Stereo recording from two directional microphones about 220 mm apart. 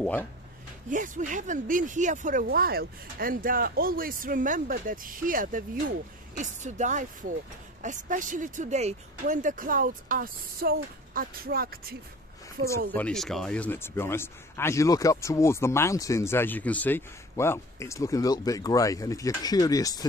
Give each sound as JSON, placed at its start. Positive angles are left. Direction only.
{"t": 0.0, "sound": "speech", "side_deg": 5}
{"t": 0.8, "sound": "speech", "side_deg": -35}
{"t": 12.6, "sound": "speech", "side_deg": -70}
{"t": 12.9, "sound": "speech", "side_deg": 5}